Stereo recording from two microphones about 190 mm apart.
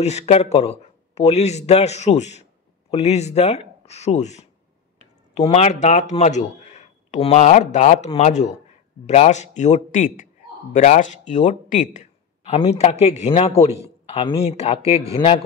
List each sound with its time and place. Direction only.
0.0 s a man's voice: 35° left (ahead or behind)